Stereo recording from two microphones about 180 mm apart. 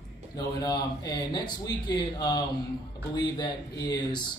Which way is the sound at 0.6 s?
20° left (ahead or behind).